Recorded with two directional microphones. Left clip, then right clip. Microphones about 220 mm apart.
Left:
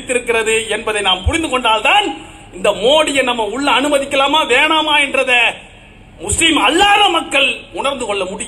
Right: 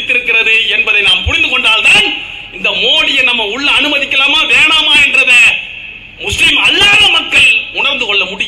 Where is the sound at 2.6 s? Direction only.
55° left (ahead or behind).